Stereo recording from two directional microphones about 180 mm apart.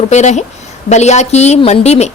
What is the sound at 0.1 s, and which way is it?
A woman's voice, 40° left (ahead or behind).